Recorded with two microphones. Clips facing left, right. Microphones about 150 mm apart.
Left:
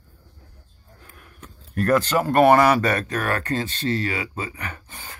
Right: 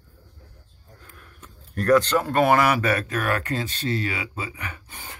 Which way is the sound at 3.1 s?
35° left (ahead or behind).